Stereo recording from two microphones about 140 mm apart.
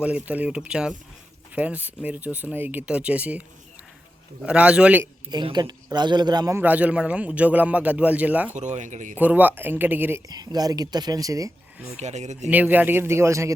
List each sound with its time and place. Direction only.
0.0 s speech: 10° right (ahead or behind)
4.4 s speech: 10° right (ahead or behind)
5.3 s speech: 30° right (ahead or behind)
6.6 s speech: 10° right (ahead or behind)
8.5 s speech: 60° right (ahead or behind)
9.1 s speech: 10° right (ahead or behind)
10.2 s speech: 30° right (ahead or behind)
11.9 s speech: 55° right (ahead or behind)
12.5 s speech: 10° right (ahead or behind)